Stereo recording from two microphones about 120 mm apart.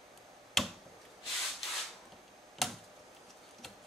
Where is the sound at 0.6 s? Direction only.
Centre (ahead or behind).